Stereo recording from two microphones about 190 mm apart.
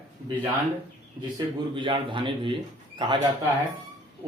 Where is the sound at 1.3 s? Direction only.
25° right (ahead or behind).